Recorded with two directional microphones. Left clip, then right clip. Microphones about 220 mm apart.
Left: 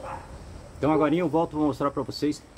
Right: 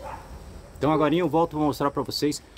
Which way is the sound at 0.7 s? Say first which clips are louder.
Right 1 dB; 45° right (ahead or behind).